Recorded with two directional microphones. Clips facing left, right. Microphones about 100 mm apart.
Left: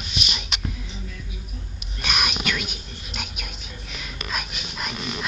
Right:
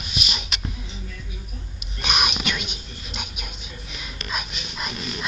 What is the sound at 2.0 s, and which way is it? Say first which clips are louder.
Whispering: right 1 dB; 20° right (ahead or behind).